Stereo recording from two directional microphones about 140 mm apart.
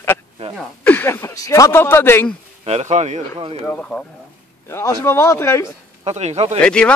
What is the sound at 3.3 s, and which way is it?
Speech, 40° right (ahead or behind).